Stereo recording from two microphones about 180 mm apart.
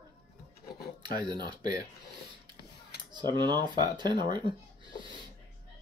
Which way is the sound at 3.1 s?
25° right (ahead or behind).